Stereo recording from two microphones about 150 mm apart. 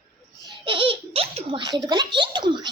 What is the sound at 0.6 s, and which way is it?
Babbling, 35° right (ahead or behind).